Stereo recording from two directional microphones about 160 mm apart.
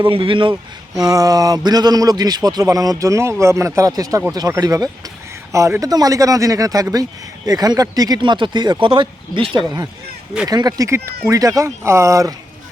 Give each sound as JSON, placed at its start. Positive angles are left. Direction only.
{"t": 0.0, "sound": "a man's voice", "side_deg": -35}
{"t": 1.0, "sound": "speech", "side_deg": -20}